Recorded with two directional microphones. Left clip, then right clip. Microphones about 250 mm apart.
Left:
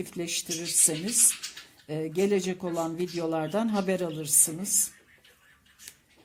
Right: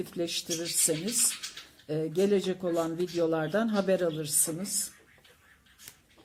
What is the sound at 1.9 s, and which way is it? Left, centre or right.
A woman's voice, left.